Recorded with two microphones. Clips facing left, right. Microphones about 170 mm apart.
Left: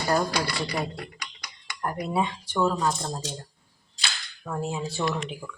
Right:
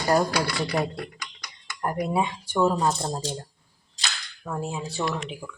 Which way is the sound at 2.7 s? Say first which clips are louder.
Right 2 dB; 30° right (ahead or behind).